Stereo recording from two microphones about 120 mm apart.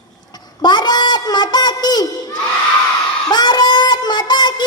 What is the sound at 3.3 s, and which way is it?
Speech, 35° left (ahead or behind).